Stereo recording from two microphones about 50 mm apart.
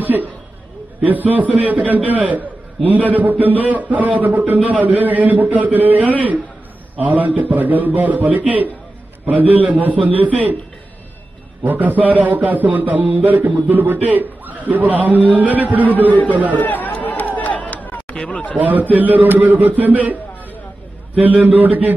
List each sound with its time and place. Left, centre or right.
0.0 s a sound: right
1.0 s a man's voice: right
11.6 s a man's voice: right
16.1 s speech: left
16.5 s run: left
18.6 s a man's voice: right
21.2 s a man's voice: right